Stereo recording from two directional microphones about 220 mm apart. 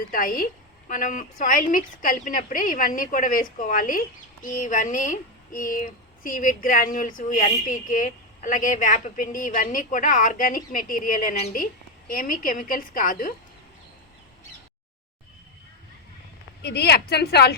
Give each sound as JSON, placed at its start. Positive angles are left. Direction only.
{"t": 0.1, "sound": "a woman's voice", "side_deg": 40}
{"t": 16.6, "sound": "a woman's voice", "side_deg": 45}